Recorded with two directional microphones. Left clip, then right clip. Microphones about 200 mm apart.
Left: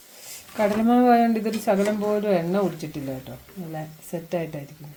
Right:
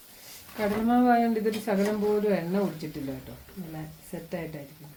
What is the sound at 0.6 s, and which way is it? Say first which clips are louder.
Speech: left 5 dB; 45° left (ahead or behind).